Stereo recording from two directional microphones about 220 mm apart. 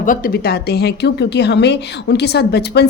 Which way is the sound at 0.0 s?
40° left (ahead or behind).